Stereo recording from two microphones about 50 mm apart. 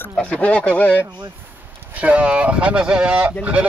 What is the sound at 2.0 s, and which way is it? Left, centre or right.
Speech, right.